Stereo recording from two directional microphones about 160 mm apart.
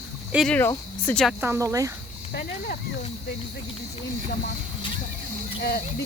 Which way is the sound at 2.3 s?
70° left (ahead or behind).